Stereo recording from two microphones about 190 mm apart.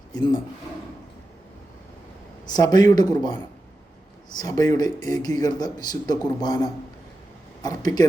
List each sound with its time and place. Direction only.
2.5 s speech: 20° left (ahead or behind)
4.4 s speech: 20° left (ahead or behind)